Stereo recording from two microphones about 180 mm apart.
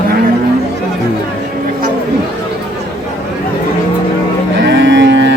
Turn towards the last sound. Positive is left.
turn(degrees=-75)  # may be behind; listen again after turning